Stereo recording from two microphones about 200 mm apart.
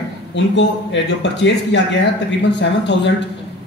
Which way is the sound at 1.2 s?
60° left (ahead or behind).